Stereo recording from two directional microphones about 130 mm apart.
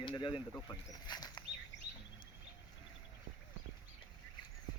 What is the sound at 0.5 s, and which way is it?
Speech, 25° left (ahead or behind).